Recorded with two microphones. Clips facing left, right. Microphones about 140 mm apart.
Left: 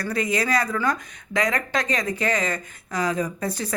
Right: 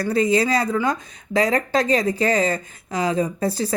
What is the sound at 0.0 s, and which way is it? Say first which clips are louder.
Speech: right 6 dB; 30° right (ahead or behind).